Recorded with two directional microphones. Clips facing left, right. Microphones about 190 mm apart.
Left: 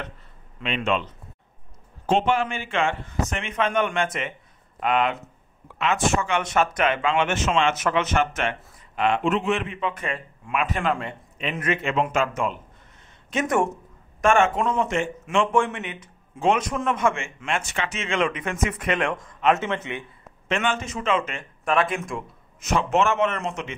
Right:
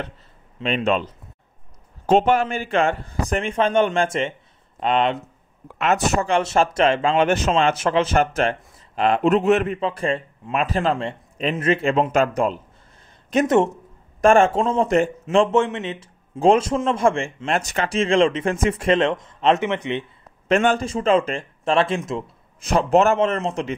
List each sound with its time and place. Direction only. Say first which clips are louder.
0.6 s speech: right 4 dB; 35° right (ahead or behind)
5.8 s speech: right 3 dB; 40° right (ahead or behind); by 20.1 s 20° right (ahead or behind)
20.4 s speech: right 7 dB; 40° right (ahead or behind)